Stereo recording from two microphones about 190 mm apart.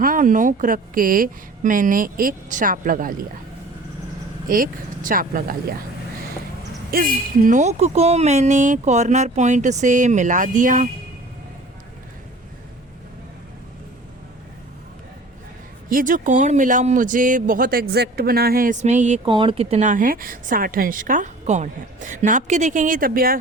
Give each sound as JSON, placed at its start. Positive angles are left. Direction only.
{"t": 0.0, "sound": "a woman's voice", "side_deg": -45}
{"t": 4.4, "sound": "a woman's voice", "side_deg": -45}
{"t": 6.9, "sound": "speech", "side_deg": -45}
{"t": 15.9, "sound": "a woman's voice", "side_deg": -45}